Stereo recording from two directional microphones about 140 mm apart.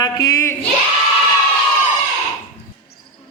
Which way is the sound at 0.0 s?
25° left (ahead or behind).